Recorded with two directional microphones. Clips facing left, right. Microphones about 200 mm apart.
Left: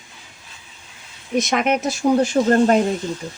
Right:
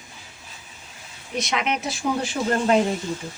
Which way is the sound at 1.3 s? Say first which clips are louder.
Left 7 dB; 45° left (ahead or behind).